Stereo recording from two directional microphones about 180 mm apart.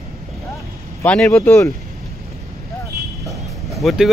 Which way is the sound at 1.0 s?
5° left (ahead or behind).